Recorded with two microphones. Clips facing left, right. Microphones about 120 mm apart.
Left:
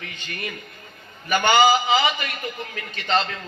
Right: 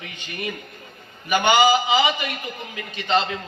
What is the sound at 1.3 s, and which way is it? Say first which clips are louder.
A man's voice: even; 15° right (ahead or behind).